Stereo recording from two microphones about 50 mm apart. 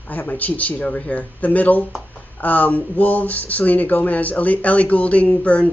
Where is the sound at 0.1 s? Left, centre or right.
Left.